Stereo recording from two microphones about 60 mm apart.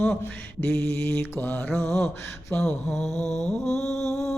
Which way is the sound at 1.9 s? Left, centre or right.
Left.